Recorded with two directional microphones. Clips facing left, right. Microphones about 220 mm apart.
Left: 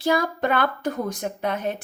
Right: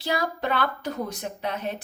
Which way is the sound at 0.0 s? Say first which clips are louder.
Left 5 dB; 50° left (ahead or behind).